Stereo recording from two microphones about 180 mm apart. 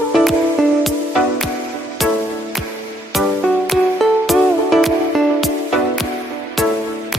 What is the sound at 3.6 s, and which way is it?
Music, centre (ahead or behind).